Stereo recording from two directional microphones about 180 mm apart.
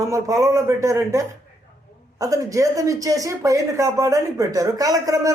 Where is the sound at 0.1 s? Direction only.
20° right (ahead or behind).